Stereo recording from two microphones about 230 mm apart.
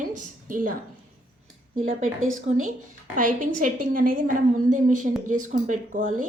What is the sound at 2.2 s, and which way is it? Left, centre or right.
A woman's voice, right.